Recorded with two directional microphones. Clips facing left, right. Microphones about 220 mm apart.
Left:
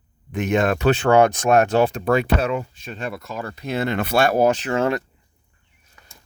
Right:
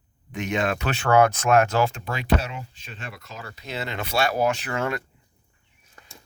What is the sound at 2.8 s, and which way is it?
Speech, 50° left (ahead or behind).